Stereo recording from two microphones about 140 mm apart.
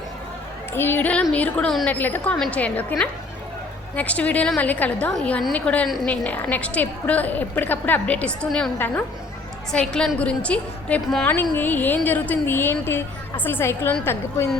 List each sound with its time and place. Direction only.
0.7 s a woman's voice: 15° left (ahead or behind)
3.9 s a woman's voice: 10° left (ahead or behind)
9.7 s a woman's voice: 5° left (ahead or behind)